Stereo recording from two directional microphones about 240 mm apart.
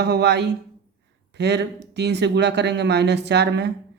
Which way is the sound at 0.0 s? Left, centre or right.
Right.